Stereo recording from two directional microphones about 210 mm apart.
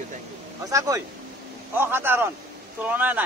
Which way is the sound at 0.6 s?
15° right (ahead or behind).